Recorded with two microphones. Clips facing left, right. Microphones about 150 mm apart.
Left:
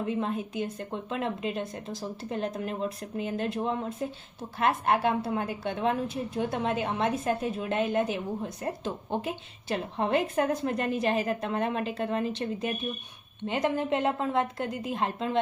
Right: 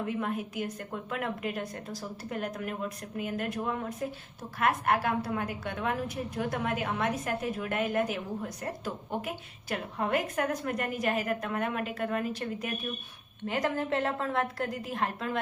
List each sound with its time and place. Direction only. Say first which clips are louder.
0.0 s a woman's voice: left 2 dB; 25° left (ahead or behind)